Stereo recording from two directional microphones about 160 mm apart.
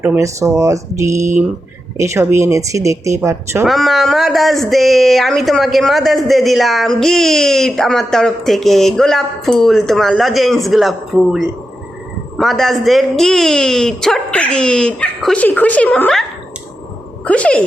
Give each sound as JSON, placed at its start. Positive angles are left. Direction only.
{"t": 0.2, "sound": "speech", "side_deg": -20}
{"t": 3.7, "sound": "speech", "side_deg": 0}
{"t": 17.2, "sound": "speech", "side_deg": 10}